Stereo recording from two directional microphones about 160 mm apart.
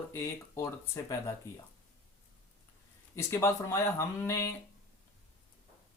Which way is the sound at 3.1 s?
15° left (ahead or behind).